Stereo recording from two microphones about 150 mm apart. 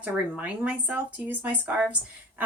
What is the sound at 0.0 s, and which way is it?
A woman's voice, 10° right (ahead or behind).